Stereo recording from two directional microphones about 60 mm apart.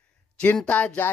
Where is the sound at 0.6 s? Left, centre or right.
Left.